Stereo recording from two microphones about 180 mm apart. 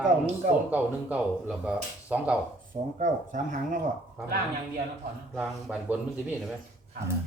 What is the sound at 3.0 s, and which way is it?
Speech, 45° right (ahead or behind).